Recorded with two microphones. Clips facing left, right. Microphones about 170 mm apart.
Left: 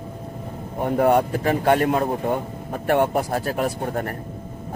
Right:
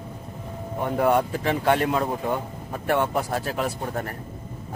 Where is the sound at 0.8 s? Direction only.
45° left (ahead or behind).